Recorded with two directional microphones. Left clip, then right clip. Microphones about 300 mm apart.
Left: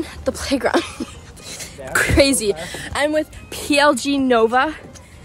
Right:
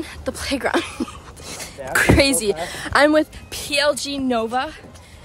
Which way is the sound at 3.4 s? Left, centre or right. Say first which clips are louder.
Left 4 dB; centre.